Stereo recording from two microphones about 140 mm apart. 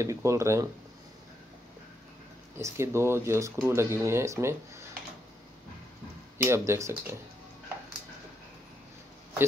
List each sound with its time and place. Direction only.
0.0 s speech: 20° right (ahead or behind)
2.6 s speech: 20° right (ahead or behind)
6.3 s speech: 20° right (ahead or behind)